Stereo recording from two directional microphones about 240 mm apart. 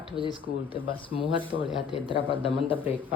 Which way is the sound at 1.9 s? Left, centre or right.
Left.